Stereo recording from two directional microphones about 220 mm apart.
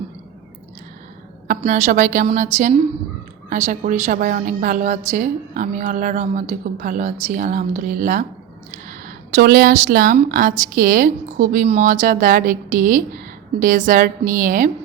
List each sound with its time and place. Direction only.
1.5 s a woman's voice: 40° right (ahead or behind)